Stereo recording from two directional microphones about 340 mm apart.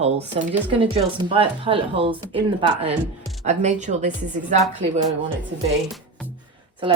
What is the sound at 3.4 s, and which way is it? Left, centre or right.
Speech, right.